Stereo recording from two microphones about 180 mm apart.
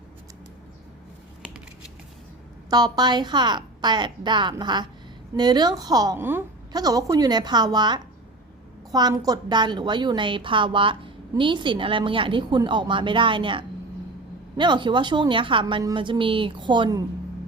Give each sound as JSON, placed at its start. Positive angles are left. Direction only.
{"t": 2.6, "sound": "a woman's voice", "side_deg": -20}